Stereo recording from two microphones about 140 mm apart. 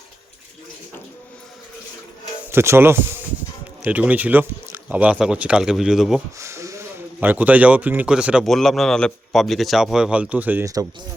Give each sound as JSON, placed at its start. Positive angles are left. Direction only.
{"t": 2.5, "sound": "speech", "side_deg": -15}
{"t": 6.4, "sound": "speech", "side_deg": -20}